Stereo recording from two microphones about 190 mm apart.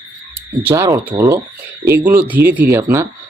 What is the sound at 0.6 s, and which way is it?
Speech, 15° right (ahead or behind).